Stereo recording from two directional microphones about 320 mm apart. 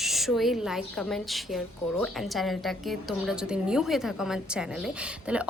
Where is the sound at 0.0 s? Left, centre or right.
Centre.